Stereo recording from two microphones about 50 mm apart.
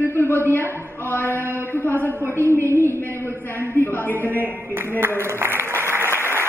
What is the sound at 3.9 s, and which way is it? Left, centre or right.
Speech, left.